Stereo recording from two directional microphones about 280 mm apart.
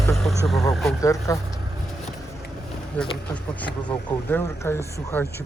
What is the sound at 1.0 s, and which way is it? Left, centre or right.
Speech, centre.